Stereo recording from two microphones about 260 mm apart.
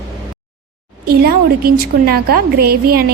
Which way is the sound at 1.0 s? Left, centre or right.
Right.